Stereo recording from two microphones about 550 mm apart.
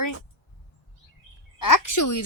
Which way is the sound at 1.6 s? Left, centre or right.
Left.